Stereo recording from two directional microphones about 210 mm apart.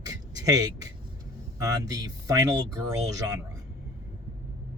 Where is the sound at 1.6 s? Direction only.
15° right (ahead or behind).